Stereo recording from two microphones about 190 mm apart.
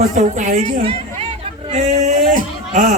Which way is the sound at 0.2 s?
40° right (ahead or behind).